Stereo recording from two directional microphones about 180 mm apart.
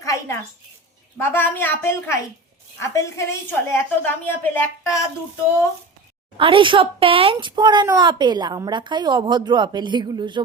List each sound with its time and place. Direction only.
0.0 s a sound: 20° left (ahead or behind)
1.2 s a woman's voice: 10° left (ahead or behind)
6.3 s a child's voice: 30° right (ahead or behind)